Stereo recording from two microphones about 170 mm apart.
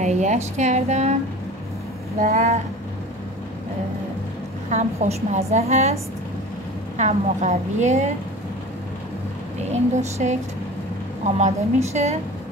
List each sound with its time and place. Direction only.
0.0 s a woman's voice: 45° right (ahead or behind)
2.3 s a woman's voice: 40° right (ahead or behind)
4.6 s a woman's voice: 45° right (ahead or behind)
7.0 s a woman's voice: 45° right (ahead or behind)
9.7 s a woman's voice: 40° right (ahead or behind)